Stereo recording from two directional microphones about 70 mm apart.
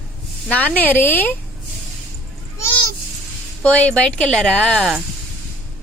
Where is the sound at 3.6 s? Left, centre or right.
Centre.